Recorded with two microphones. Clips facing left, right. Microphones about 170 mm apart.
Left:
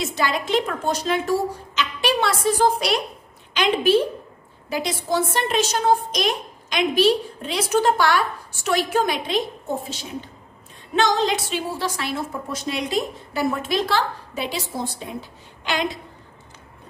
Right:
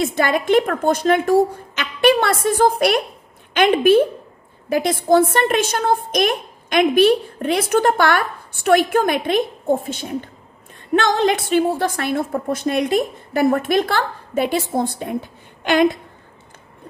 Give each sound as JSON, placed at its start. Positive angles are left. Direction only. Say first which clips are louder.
{"t": 0.0, "sound": "a woman's voice", "louder": "right 5 dB", "side_deg": -55}